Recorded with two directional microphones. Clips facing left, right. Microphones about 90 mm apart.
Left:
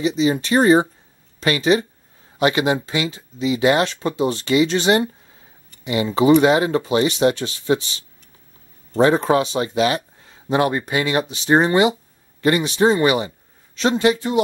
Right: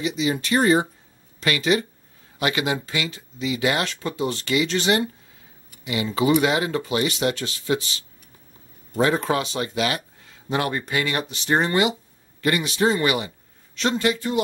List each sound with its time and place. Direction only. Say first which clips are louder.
0.0 s speech: left 5 dB; 30° left (ahead or behind)